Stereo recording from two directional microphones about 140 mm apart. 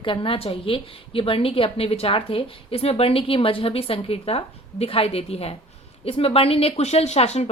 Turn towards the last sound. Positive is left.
turn(degrees=50)  # may be behind; listen again after turning